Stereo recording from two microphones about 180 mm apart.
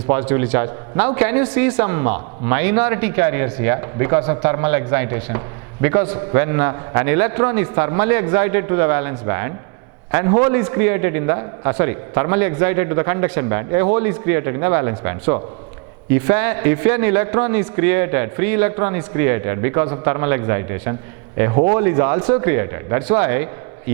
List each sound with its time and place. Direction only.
0.1 s a man's voice: 15° right (ahead or behind)